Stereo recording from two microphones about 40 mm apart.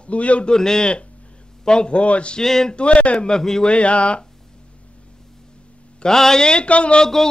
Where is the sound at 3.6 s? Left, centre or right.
Left.